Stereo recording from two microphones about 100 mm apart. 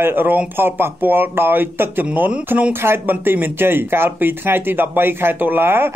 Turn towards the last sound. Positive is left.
turn(degrees=-20)  # may be behind; listen again after turning